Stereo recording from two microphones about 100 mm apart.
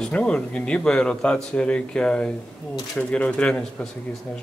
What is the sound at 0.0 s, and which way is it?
Speech, 10° left (ahead or behind).